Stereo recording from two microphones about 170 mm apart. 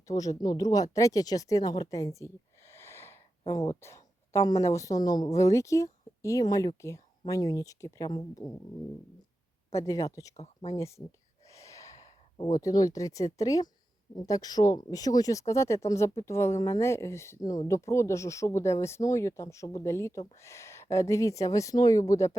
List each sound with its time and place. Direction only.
0.1 s speech: 20° left (ahead or behind)
9.7 s speech: 20° left (ahead or behind)
10.3 s speech: 40° left (ahead or behind)
10.8 s speech: 15° left (ahead or behind)
11.4 s sigh: 20° left (ahead or behind)
12.6 s speech: 20° left (ahead or behind)